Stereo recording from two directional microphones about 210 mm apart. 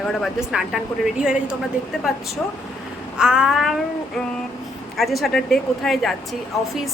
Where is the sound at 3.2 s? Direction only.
5° right (ahead or behind).